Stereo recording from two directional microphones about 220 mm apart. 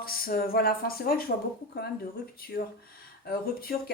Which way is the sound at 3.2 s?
45° left (ahead or behind).